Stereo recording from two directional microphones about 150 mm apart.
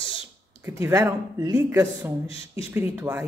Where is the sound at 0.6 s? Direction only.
20° right (ahead or behind).